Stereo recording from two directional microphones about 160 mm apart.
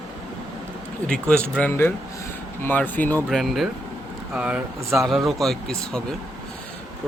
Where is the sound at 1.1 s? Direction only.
5° left (ahead or behind).